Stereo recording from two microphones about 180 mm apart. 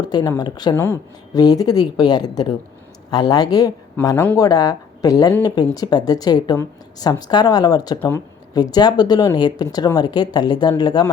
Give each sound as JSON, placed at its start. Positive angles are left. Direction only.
{"t": 0.0, "sound": "speech", "side_deg": 25}
{"t": 4.0, "sound": "speech", "side_deg": 10}
{"t": 4.4, "sound": "speech", "side_deg": 20}